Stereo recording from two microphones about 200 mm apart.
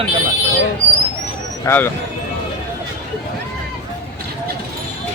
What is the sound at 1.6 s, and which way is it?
Speech, 10° left (ahead or behind).